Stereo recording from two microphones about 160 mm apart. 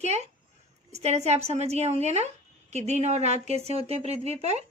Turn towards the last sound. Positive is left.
turn(degrees=-40)  # may be behind; listen again after turning